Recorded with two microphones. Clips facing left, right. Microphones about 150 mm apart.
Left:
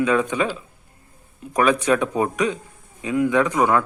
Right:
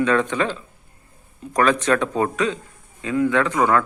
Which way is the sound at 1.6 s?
10° left (ahead or behind).